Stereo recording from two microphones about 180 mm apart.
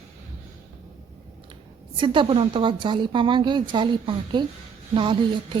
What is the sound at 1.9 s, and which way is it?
A woman's voice, 25° right (ahead or behind).